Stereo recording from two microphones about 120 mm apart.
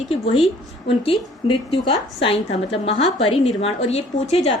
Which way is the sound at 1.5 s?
45° left (ahead or behind).